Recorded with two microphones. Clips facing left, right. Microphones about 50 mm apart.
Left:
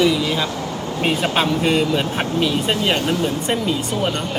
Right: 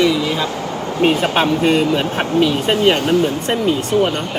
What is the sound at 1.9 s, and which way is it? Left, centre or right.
Speech, centre.